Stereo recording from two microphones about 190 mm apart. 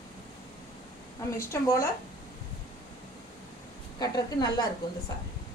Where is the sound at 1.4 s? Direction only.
15° left (ahead or behind).